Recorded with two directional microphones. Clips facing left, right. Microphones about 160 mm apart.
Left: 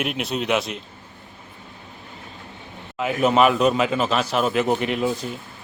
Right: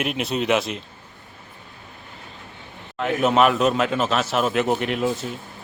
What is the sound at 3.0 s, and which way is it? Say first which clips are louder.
A man's voice: even; centre (ahead or behind).